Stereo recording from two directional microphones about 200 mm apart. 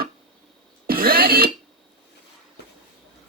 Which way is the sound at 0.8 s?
45° right (ahead or behind).